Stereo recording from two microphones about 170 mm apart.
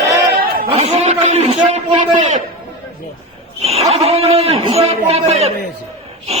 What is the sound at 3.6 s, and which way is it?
A man's voice, 35° right (ahead or behind).